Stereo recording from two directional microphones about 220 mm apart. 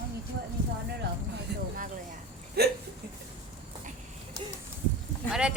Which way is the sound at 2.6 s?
45° right (ahead or behind).